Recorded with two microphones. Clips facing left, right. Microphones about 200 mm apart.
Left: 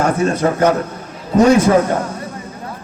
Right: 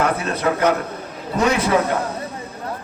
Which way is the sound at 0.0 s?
45° left (ahead or behind).